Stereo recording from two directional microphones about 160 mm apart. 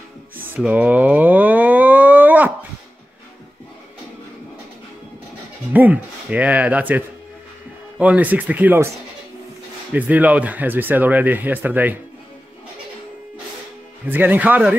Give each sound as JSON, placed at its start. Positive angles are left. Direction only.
{"t": 0.6, "sound": "a sound", "side_deg": -10}
{"t": 5.7, "sound": "speech", "side_deg": -10}
{"t": 8.0, "sound": "speech", "side_deg": -10}
{"t": 9.9, "sound": "speech", "side_deg": -10}
{"t": 14.0, "sound": "speech", "side_deg": -10}